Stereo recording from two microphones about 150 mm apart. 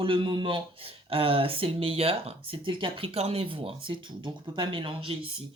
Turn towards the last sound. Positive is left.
turn(degrees=-35)  # may be behind; listen again after turning